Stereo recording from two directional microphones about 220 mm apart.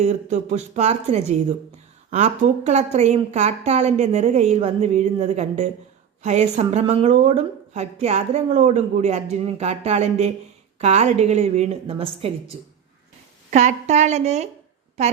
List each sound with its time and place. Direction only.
0.0 s a woman's voice: 30° right (ahead or behind)